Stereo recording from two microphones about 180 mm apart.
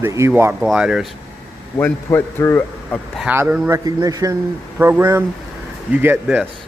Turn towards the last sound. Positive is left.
turn(degrees=-10)  # may be behind; listen again after turning